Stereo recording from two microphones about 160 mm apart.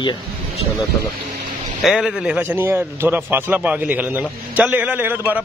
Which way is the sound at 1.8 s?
Centre (ahead or behind).